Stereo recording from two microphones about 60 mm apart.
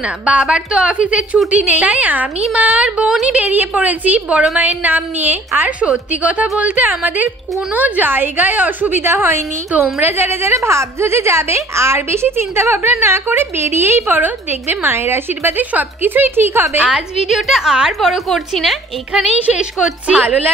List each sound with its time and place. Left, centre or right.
0.0 s a woman's voice: centre; by 10.5 s right
10.5 s a woman's voice: right
16.9 s a woman's voice: centre
19.3 s a woman's voice: right
19.6 s a woman's voice: centre